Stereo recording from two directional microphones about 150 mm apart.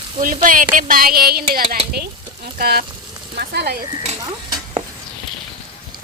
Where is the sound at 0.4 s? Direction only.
65° right (ahead or behind); by 3.8 s 90° right.